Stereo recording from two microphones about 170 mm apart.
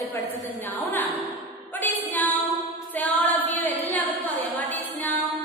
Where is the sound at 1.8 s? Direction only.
10° left (ahead or behind).